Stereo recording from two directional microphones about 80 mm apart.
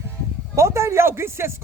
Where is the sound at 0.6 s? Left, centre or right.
Right.